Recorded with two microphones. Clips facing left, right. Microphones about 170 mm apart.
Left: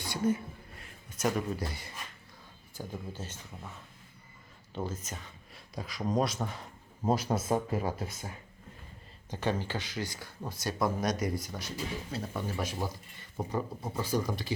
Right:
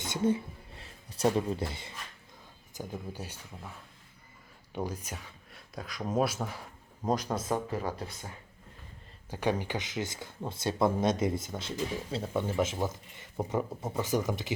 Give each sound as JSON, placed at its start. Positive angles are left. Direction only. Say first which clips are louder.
{"t": 0.0, "sound": "a sound", "louder": "right 1 dB", "side_deg": -20}
{"t": 2.7, "sound": "speech", "louder": "right 1 dB", "side_deg": -10}
{"t": 4.7, "sound": "speech", "louder": "right 1 dB", "side_deg": -15}
{"t": 5.5, "sound": "speech", "louder": "left 1 dB", "side_deg": 0}
{"t": 7.0, "sound": "speech", "louder": "left 1 dB", "side_deg": 5}
{"t": 9.3, "sound": "speech", "louder": "right 2 dB", "side_deg": -15}